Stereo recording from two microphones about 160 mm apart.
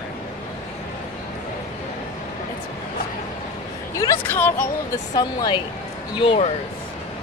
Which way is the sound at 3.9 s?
20° left (ahead or behind).